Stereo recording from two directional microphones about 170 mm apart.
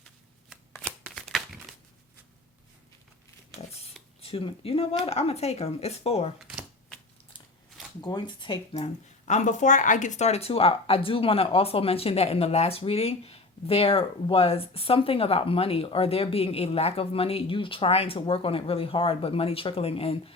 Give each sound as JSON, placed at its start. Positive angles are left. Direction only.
{"t": 0.8, "sound": "shuffling cards", "side_deg": 0}
{"t": 3.7, "sound": "a sound", "side_deg": 35}
{"t": 4.2, "sound": "speech", "side_deg": 35}
{"t": 8.0, "sound": "speech", "side_deg": 25}